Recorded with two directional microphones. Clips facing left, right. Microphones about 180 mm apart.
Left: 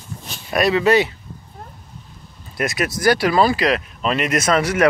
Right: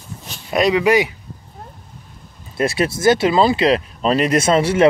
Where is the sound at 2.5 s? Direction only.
30° right (ahead or behind).